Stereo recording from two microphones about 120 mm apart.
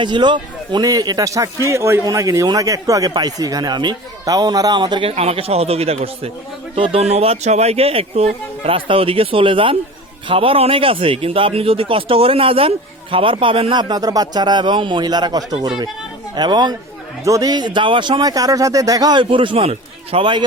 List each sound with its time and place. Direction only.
0.0 s speech: 40° right (ahead or behind)
5.1 s speech: 55° right (ahead or behind)
6.7 s speech: 45° right (ahead or behind)
7.0 s speech: 60° right (ahead or behind); by 19.2 s 30° right (ahead or behind)
19.2 s speech: 45° right (ahead or behind)